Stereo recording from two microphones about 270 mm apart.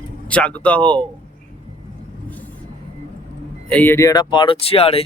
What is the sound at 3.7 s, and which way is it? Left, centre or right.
Speech, centre.